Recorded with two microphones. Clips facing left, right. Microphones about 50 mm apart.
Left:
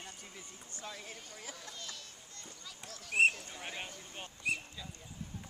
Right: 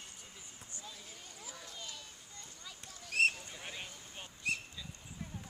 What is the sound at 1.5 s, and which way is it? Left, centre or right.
Children playing, centre.